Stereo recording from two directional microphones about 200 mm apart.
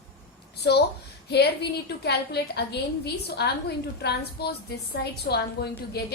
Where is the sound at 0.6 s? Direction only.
55° left (ahead or behind).